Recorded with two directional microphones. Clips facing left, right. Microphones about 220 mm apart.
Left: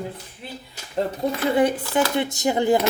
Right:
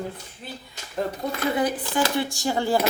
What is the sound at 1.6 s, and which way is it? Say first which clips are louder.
Speech: left 6 dB; 25° left (ahead or behind).